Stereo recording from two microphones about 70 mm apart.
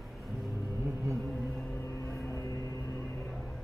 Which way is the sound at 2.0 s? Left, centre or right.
Left.